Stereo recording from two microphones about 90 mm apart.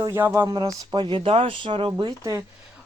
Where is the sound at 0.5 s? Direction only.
50° right (ahead or behind).